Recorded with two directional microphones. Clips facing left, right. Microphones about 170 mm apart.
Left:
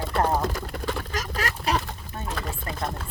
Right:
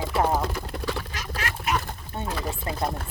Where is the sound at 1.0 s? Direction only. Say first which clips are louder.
Left 3 dB; 40° left (ahead or behind).